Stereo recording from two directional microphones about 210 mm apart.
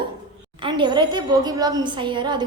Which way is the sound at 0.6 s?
20° right (ahead or behind).